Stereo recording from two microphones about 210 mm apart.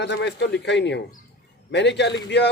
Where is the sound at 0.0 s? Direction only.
55° left (ahead or behind).